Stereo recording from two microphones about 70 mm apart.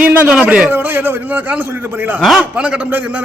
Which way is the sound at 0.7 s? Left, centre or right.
Right.